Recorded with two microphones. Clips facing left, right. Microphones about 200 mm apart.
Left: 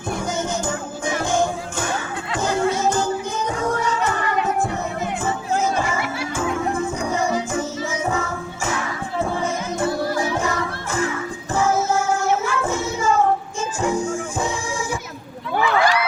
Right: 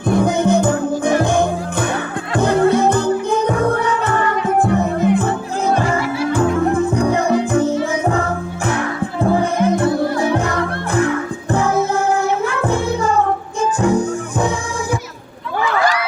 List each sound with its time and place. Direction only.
0.1 s music: 60° right (ahead or behind)